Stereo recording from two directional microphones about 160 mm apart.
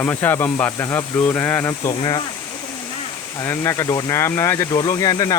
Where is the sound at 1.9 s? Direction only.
30° left (ahead or behind).